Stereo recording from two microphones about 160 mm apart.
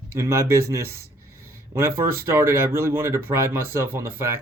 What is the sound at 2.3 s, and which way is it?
Speech, 15° right (ahead or behind).